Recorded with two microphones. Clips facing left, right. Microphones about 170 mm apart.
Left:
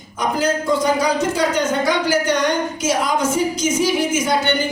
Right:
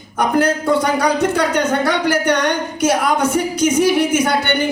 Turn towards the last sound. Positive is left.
turn(degrees=-60)  # may be behind; listen again after turning